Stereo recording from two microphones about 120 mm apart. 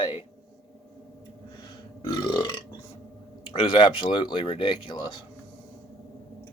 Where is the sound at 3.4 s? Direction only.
45° left (ahead or behind).